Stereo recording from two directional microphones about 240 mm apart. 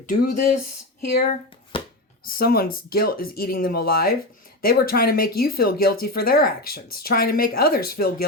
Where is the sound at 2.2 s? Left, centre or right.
Left.